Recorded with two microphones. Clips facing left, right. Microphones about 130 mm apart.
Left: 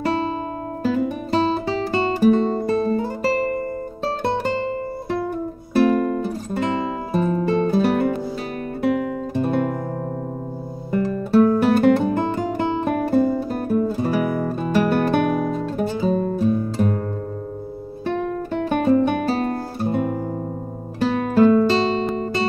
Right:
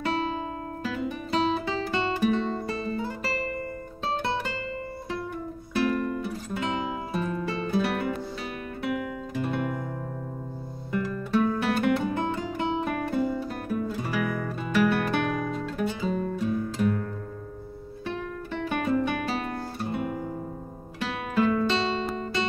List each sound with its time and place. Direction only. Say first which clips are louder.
0.8 s music: left 10 dB; 40° left (ahead or behind)
5.9 s music: left 8 dB; 45° left (ahead or behind)
8.8 s guitar: left 9 dB; 40° left (ahead or behind)
10.9 s music: left 7 dB; 40° left (ahead or behind)
12.2 s music: left 7 dB; 50° left (ahead or behind); by 17.0 s 35° left (ahead or behind)
18.0 s music: left 10 dB; 55° left (ahead or behind); by 19.0 s 35° left (ahead or behind)
19.0 s guitar: left 8 dB; 35° left (ahead or behind)
21.0 s music: left 10 dB; 45° left (ahead or behind)